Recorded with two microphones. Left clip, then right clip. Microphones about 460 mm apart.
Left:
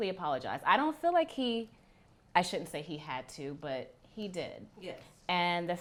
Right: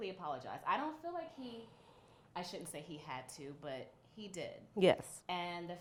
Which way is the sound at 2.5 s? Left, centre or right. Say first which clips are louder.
Left 10 dB; left.